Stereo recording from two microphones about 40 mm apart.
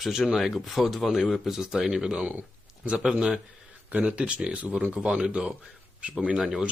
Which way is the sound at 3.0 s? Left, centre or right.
Right.